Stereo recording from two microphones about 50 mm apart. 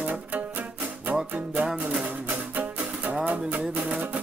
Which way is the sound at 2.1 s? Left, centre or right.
Right.